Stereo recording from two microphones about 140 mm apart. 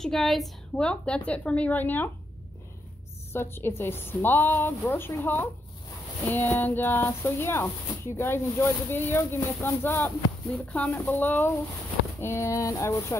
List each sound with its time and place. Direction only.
0.0 s speech: centre (ahead or behind)
3.3 s speech: 15° left (ahead or behind)